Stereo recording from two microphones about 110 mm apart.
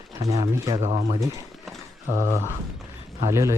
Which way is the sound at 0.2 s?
30° right (ahead or behind).